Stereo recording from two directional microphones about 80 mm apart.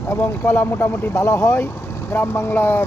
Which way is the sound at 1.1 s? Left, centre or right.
Left.